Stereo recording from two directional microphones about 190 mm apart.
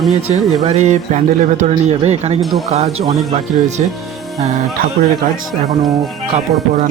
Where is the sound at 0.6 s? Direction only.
35° right (ahead or behind).